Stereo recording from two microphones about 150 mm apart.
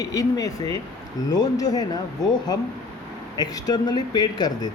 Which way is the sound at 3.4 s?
25° left (ahead or behind).